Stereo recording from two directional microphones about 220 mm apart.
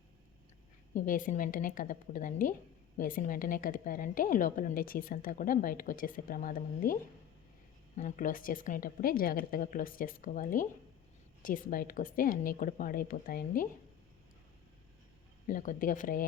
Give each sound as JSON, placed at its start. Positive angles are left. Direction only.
{"t": 0.9, "sound": "a woman's voice", "side_deg": 35}
{"t": 15.4, "sound": "a woman's voice", "side_deg": 40}